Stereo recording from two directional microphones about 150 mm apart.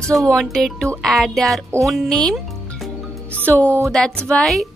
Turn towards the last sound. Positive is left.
turn(degrees=0)  # may be behind; listen again after turning